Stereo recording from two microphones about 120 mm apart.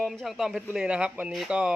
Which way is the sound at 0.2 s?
Centre (ahead or behind).